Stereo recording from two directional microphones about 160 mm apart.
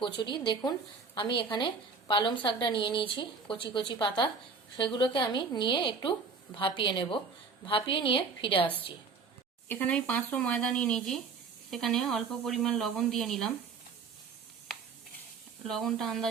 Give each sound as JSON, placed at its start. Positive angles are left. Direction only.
{"t": 0.2, "sound": "a woman's voice", "side_deg": 30}
{"t": 9.6, "sound": "speech", "side_deg": 10}
{"t": 15.6, "sound": "speech", "side_deg": 0}